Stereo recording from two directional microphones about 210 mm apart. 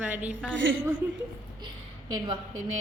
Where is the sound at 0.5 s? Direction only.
65° right (ahead or behind).